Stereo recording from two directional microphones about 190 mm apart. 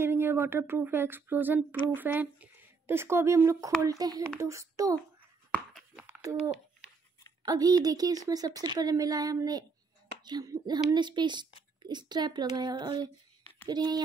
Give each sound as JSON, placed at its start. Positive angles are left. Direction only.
{"t": 0.0, "sound": "speech", "side_deg": -10}
{"t": 5.5, "sound": "a sound", "side_deg": 0}
{"t": 7.4, "sound": "speech", "side_deg": -20}